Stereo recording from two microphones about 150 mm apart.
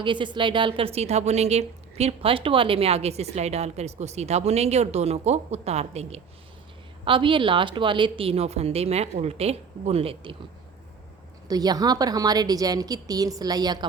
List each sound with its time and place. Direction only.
0.0 s a woman's voice: 30° right (ahead or behind)
7.0 s a woman's voice: 35° right (ahead or behind)
11.4 s a woman's voice: 25° right (ahead or behind)